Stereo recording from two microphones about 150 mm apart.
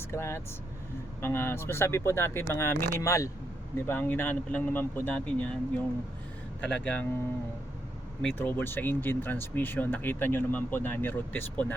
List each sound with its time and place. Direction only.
0.1 s speech: 15° left (ahead or behind)
8.4 s speech: 15° left (ahead or behind)